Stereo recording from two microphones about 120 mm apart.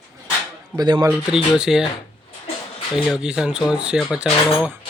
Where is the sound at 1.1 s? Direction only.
5° right (ahead or behind).